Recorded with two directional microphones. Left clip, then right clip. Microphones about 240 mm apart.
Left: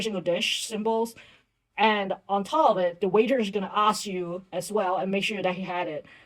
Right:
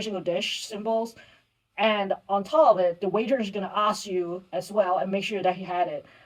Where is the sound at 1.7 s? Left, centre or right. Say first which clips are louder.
Even; left.